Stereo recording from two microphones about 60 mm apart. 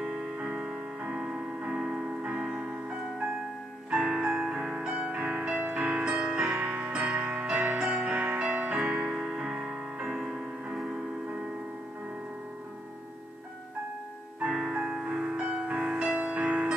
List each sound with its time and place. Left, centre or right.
0.1 s music: right
14.7 s music: centre